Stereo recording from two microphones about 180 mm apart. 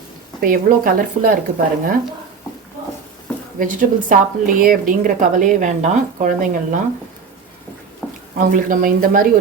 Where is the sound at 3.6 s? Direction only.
45° right (ahead or behind).